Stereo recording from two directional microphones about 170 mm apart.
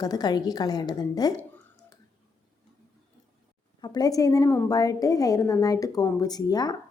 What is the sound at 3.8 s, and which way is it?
A woman's voice, 25° left (ahead or behind).